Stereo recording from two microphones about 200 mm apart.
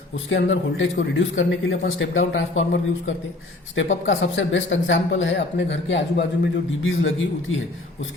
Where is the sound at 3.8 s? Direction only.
70° left (ahead or behind).